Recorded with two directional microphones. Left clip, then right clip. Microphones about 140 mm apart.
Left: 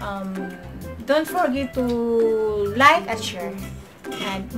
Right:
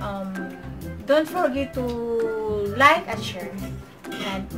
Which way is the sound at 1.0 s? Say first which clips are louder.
Even; 25° left (ahead or behind).